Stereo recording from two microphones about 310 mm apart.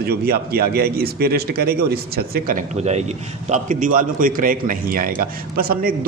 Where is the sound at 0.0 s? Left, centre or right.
Right.